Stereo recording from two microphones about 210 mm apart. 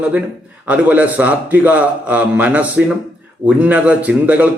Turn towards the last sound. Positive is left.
turn(degrees=-5)  # may be behind; listen again after turning